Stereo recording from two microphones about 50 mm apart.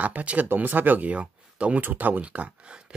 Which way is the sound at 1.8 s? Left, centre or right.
Right.